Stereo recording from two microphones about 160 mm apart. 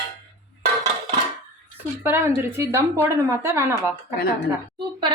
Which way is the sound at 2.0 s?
15° right (ahead or behind).